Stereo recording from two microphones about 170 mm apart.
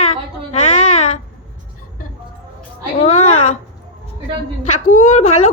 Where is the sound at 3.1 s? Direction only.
40° left (ahead or behind).